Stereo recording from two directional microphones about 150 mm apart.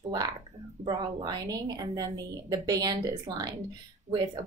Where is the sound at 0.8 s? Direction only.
25° right (ahead or behind).